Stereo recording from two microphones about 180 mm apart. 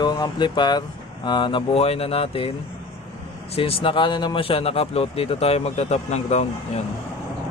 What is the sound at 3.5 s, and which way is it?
Speech, 30° left (ahead or behind).